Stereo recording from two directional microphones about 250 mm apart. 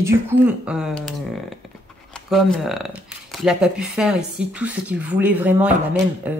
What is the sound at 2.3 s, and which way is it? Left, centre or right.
A woman's voice, centre.